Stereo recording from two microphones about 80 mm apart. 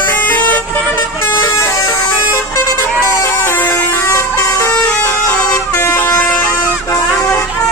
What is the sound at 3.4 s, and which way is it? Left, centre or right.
Vehicle, left.